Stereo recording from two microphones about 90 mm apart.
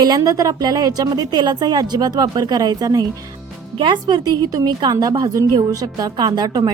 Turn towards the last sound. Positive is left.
turn(degrees=-45)  # may be behind; listen again after turning